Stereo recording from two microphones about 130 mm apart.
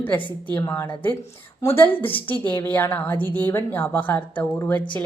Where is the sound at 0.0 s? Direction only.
15° left (ahead or behind).